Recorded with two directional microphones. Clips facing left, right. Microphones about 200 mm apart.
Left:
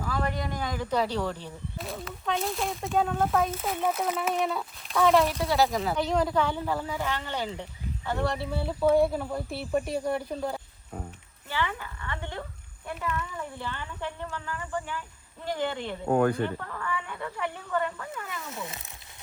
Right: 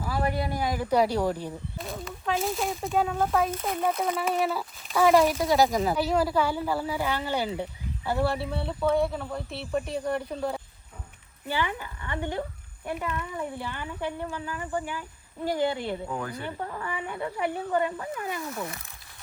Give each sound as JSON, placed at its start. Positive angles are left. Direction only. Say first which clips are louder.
{"t": 0.1, "sound": "speech", "louder": "right 3 dB", "side_deg": -10}
{"t": 1.8, "sound": "speech", "louder": "even", "side_deg": 0}
{"t": 5.9, "sound": "speech", "louder": "right 1 dB", "side_deg": -5}
{"t": 11.4, "sound": "speech", "louder": "right 2 dB", "side_deg": -15}
{"t": 16.0, "sound": "speech", "louder": "left 10 dB", "side_deg": 60}
{"t": 16.6, "sound": "speech", "louder": "right 1 dB", "side_deg": -25}
{"t": 18.5, "sound": "speech", "louder": "right 3 dB", "side_deg": 20}